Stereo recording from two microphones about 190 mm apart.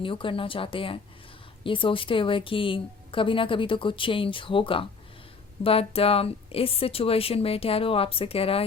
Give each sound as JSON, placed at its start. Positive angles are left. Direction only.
{"t": 0.0, "sound": "a woman's voice", "side_deg": 25}